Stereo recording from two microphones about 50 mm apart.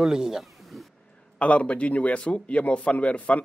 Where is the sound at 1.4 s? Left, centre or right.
Left.